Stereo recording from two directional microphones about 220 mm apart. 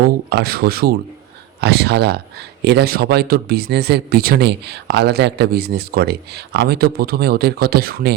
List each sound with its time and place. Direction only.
0.3 s speech: 45° right (ahead or behind)